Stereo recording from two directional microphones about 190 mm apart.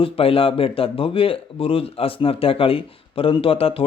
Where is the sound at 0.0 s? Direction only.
30° left (ahead or behind).